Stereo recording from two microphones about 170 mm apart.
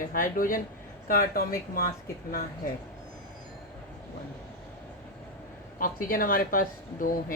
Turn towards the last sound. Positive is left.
turn(degrees=55)  # may be behind; listen again after turning